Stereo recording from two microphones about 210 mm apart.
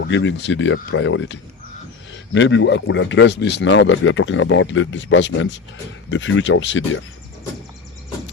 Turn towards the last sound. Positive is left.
turn(degrees=65)  # may be behind; listen again after turning